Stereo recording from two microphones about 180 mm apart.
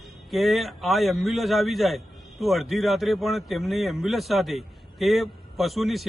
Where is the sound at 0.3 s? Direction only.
Centre (ahead or behind).